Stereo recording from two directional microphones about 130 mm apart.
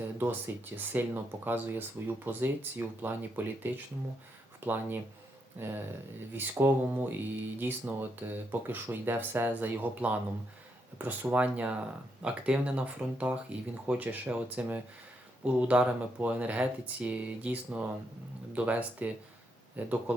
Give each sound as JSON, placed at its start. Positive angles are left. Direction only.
{"t": 0.2, "sound": "speech", "side_deg": -15}